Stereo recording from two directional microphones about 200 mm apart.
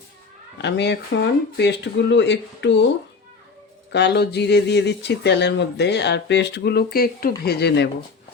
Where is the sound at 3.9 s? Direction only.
55° left (ahead or behind).